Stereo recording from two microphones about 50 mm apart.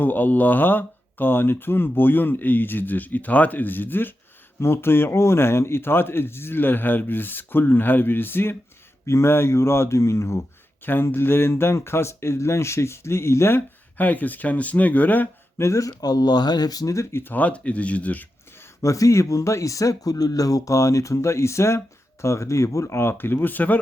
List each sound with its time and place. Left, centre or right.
0.0 s a man's voice: left
9.0 s speech: left
11.0 s speech: left
14.0 s speech: left
15.5 s speech: left
17.3 s speech: left
18.8 s speech: left
22.2 s speech: left